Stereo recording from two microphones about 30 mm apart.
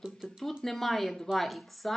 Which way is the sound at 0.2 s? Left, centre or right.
Centre.